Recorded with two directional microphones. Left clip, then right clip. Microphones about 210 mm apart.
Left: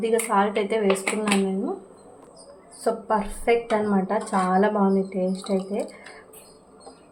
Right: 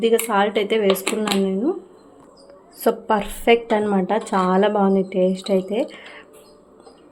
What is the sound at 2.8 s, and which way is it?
A woman's voice, 45° right (ahead or behind).